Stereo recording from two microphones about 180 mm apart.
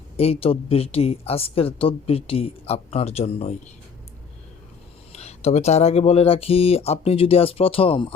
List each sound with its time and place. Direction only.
0.2 s speech: 30° left (ahead or behind)
5.1 s speech: 35° left (ahead or behind)